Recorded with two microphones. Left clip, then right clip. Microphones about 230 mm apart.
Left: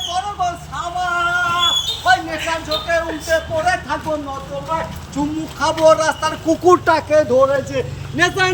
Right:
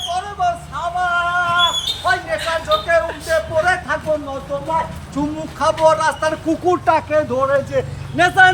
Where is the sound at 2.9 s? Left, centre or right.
Centre.